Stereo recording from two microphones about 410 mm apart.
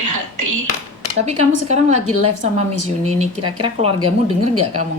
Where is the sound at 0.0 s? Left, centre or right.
Right.